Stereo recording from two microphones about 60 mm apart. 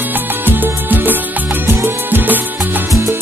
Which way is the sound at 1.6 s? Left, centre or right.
Right.